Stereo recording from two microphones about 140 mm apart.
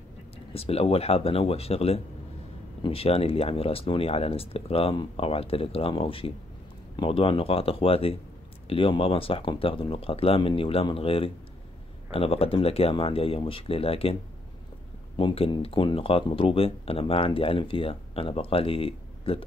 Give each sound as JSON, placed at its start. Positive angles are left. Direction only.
{"t": 0.5, "sound": "speech", "side_deg": 45}
{"t": 15.1, "sound": "speech", "side_deg": 40}